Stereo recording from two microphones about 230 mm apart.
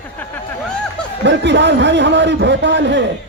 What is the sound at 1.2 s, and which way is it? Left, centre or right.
A man's voice, right.